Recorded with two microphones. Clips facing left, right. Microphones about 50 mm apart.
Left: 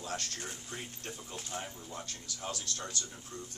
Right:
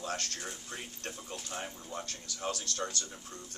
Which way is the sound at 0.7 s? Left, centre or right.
Right.